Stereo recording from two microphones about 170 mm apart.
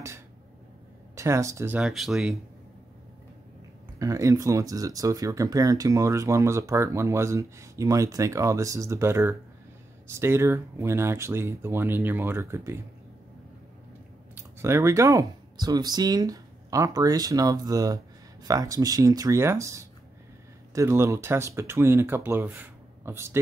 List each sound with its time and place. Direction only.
1.1 s speech: 15° right (ahead or behind)
1.8 s speech: centre (ahead or behind)
4.0 s speech: 20° right (ahead or behind)
14.3 s speech: 15° right (ahead or behind)